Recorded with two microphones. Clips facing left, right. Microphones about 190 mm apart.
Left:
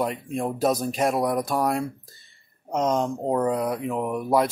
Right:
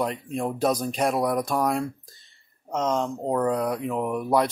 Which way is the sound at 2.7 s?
15° left (ahead or behind).